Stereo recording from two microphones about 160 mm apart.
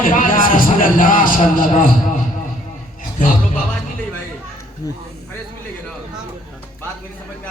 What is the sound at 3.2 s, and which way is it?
Music, 55° left (ahead or behind).